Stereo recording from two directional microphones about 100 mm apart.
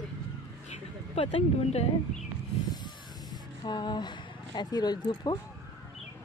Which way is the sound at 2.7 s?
45° left (ahead or behind).